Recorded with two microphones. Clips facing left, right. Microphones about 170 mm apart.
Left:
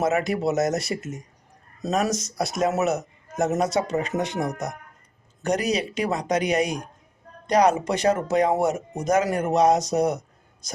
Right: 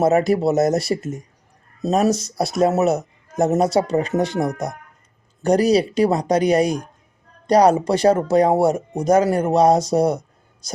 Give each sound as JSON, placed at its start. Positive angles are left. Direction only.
{"t": 0.0, "sound": "speech", "side_deg": -35}